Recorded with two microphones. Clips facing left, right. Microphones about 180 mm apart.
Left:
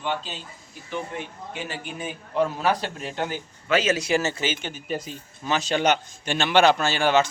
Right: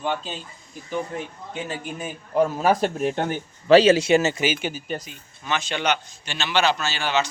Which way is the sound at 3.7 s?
30° right (ahead or behind).